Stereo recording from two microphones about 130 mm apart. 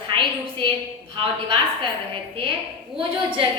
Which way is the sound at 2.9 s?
45° right (ahead or behind).